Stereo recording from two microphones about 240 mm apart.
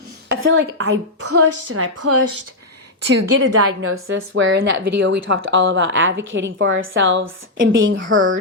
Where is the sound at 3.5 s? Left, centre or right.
Right.